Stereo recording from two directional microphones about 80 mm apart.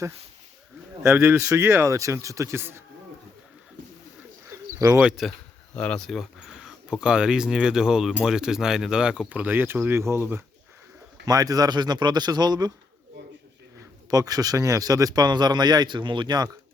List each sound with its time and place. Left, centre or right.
1.1 s speech: right
4.8 s speech: right
5.2 s speech: centre
5.7 s speech: centre
6.1 s speech: centre; by 10.4 s right
11.3 s speech: right
14.1 s speech: right